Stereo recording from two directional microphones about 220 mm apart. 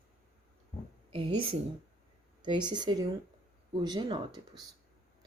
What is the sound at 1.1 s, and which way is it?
Speech, 25° right (ahead or behind).